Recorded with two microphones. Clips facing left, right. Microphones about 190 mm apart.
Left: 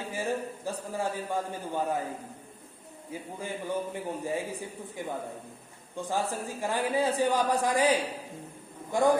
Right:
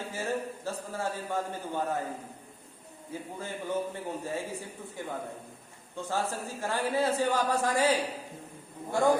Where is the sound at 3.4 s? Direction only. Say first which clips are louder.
Even; 15° left (ahead or behind).